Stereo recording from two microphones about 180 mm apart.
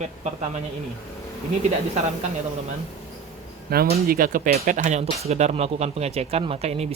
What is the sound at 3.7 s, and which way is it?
Speech, 55° right (ahead or behind).